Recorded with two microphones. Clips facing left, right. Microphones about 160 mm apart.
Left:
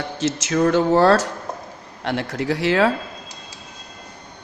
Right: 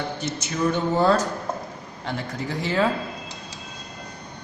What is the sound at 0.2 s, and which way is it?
Speech, 90° left.